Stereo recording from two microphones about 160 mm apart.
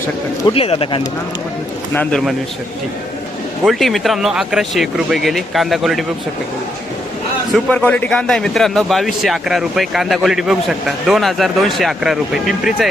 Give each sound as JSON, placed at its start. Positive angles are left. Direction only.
{"t": 0.5, "sound": "speech", "side_deg": 35}
{"t": 1.9, "sound": "a man's voice", "side_deg": 10}
{"t": 3.6, "sound": "speech", "side_deg": 0}
{"t": 7.5, "sound": "speech", "side_deg": 5}